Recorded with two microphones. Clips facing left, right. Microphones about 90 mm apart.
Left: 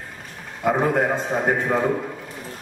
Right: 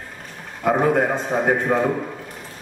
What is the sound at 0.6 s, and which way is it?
A man's voice, centre (ahead or behind).